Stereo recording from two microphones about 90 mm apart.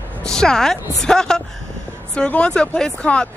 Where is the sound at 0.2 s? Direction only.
10° left (ahead or behind).